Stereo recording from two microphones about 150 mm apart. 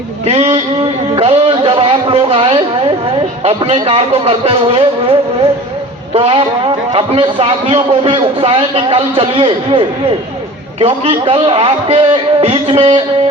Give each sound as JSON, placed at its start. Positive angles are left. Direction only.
{"t": 0.3, "sound": "a man's voice", "side_deg": -45}
{"t": 1.1, "sound": "a sound", "side_deg": -40}
{"t": 3.4, "sound": "a man's voice", "side_deg": -40}